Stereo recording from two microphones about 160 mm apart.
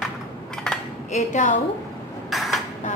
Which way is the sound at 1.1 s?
50° left (ahead or behind).